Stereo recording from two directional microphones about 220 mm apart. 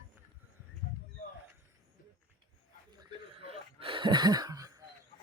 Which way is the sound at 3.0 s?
25° right (ahead or behind).